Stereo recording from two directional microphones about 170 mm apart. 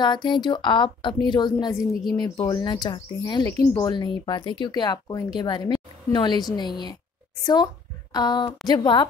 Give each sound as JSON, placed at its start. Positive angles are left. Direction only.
{"t": 0.0, "sound": "a woman's voice", "side_deg": 25}